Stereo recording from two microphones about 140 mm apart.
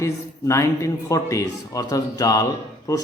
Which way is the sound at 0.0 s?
20° left (ahead or behind).